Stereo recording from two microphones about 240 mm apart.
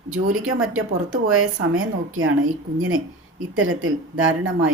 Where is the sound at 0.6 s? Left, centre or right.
Right.